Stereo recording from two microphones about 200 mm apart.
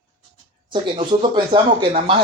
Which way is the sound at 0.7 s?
25° right (ahead or behind).